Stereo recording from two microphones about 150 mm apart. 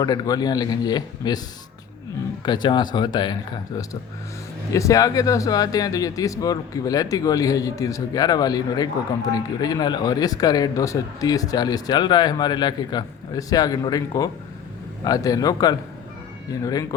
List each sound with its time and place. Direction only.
0.0 s speech: 25° left (ahead or behind)
2.4 s speech: 30° left (ahead or behind)
4.7 s speech: 20° left (ahead or behind)